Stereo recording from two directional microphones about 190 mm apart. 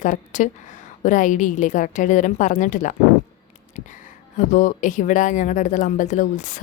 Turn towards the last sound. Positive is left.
turn(degrees=40)  # may be behind; listen again after turning